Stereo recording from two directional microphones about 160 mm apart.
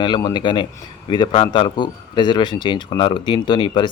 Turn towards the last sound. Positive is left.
turn(degrees=30)  # may be behind; listen again after turning